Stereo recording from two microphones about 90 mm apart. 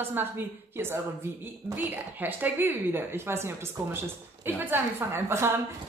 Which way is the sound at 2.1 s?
20° right (ahead or behind).